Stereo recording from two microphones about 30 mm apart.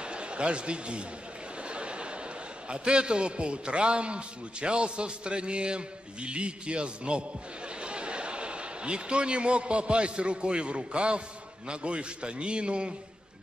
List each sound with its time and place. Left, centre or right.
0.0 s a man's voice: right
1.7 s a sound: right
2.7 s a man's voice: right